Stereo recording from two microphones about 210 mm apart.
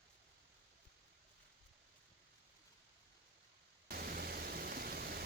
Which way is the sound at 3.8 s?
45° right (ahead or behind).